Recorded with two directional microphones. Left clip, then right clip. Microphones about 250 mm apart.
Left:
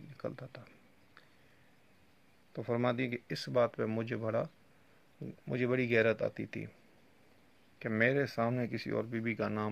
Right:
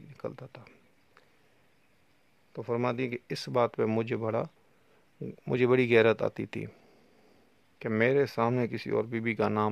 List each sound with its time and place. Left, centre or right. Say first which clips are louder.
0.1 s a sound: right 3 dB; right
2.5 s speech: right 3 dB; right
7.8 s speech: right 5 dB; right